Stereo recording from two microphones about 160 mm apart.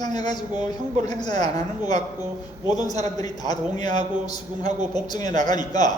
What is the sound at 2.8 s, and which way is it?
A man's voice, 25° left (ahead or behind).